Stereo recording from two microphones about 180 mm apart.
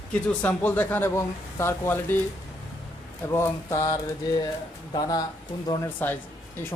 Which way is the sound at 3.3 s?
15° left (ahead or behind).